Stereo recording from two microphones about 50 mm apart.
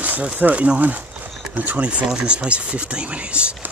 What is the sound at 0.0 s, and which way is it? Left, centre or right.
Speech, right.